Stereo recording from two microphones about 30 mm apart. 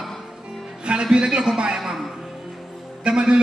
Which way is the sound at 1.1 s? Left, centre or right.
Right.